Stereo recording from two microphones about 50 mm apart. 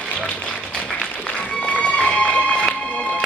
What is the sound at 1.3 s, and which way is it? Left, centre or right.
Music, left.